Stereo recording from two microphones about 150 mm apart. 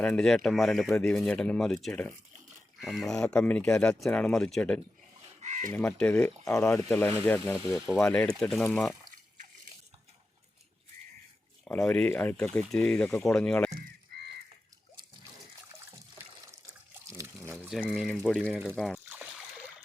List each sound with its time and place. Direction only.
0.0 s speech: 5° left (ahead or behind)
5.4 s crow: 55° right (ahead or behind)
5.7 s speech: 10° left (ahead or behind)
11.6 s speech: 5° left (ahead or behind)
17.8 s speech: centre (ahead or behind)
19.0 s splash: 5° right (ahead or behind)